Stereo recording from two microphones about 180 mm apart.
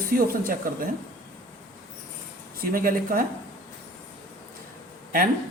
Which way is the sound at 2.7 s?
50° right (ahead or behind).